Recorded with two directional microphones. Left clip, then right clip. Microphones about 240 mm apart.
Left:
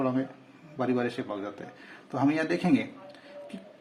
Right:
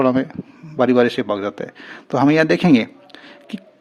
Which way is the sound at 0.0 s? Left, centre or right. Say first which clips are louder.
Right 12 dB; right.